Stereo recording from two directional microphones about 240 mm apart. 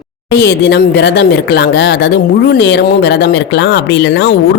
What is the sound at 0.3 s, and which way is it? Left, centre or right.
Speech, left.